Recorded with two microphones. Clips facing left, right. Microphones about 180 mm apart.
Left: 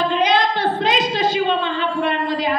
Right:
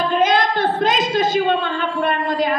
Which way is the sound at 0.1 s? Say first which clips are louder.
Right 1 dB; 45° right (ahead or behind).